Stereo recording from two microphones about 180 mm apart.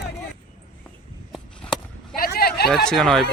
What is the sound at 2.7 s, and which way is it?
Speech, centre (ahead or behind).